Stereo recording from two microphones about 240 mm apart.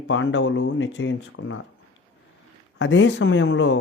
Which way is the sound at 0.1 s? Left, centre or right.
Left.